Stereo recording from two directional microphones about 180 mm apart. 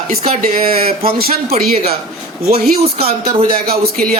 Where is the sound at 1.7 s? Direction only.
35° right (ahead or behind).